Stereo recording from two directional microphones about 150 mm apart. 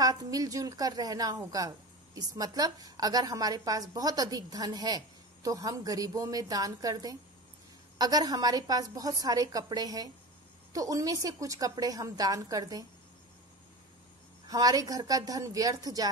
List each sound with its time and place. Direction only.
0.0 s a woman's voice: 25° right (ahead or behind)
14.5 s a woman's voice: 25° right (ahead or behind)